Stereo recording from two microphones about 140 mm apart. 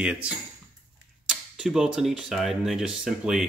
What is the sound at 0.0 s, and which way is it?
Speech, 5° right (ahead or behind).